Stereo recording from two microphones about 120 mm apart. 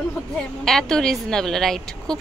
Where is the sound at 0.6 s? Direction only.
5° left (ahead or behind).